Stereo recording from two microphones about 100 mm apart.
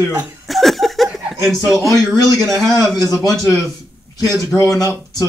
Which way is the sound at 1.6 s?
Centre (ahead or behind).